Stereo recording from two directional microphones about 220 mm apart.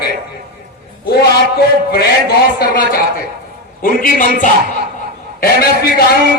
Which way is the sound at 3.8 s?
40° left (ahead or behind).